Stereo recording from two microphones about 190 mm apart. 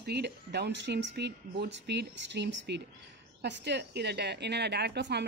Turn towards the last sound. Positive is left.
turn(degrees=-65)  # may be behind; listen again after turning